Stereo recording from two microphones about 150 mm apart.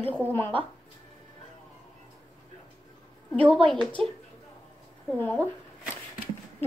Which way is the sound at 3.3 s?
10° left (ahead or behind).